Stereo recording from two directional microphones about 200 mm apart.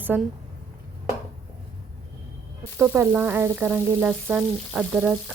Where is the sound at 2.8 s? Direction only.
10° right (ahead or behind).